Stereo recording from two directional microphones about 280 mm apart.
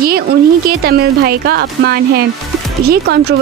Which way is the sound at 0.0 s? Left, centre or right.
Right.